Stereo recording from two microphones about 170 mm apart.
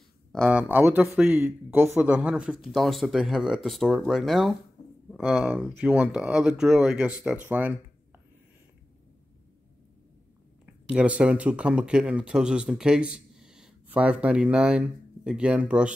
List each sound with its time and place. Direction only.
0.5 s speech: 10° right (ahead or behind)
4.8 s a sound: 65° left (ahead or behind)
5.1 s speech: centre (ahead or behind)
10.9 s speech: 5° right (ahead or behind)